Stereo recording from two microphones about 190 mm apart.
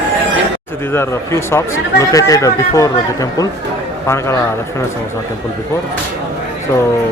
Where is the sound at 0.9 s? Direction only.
15° left (ahead or behind).